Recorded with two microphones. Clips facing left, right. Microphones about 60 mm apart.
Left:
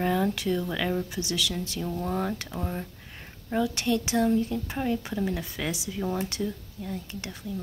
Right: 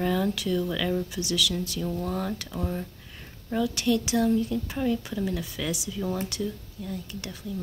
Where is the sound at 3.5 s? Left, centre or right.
Left.